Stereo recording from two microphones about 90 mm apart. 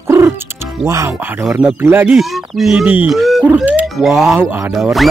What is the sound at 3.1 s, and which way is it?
Speech, centre (ahead or behind).